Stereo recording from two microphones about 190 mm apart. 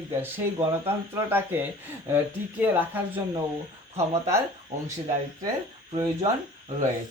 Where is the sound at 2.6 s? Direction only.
10° right (ahead or behind).